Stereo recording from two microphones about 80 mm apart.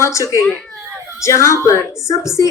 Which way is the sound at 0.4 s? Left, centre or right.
Centre.